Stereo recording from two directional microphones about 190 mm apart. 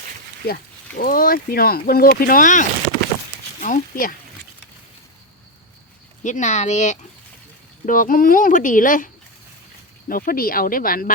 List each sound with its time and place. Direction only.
0.4 s speech: 50° left (ahead or behind)
6.2 s speech: 40° left (ahead or behind)
10.1 s speech: 50° left (ahead or behind)